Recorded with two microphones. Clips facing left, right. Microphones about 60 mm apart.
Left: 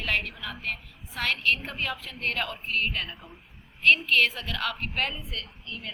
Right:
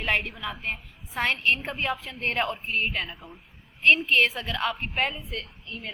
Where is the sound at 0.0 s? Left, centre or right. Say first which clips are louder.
Right 2 dB; right.